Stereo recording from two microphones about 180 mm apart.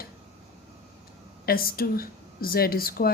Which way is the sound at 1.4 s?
55° left (ahead or behind).